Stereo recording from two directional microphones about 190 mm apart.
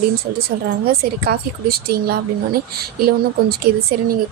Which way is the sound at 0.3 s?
55° right (ahead or behind).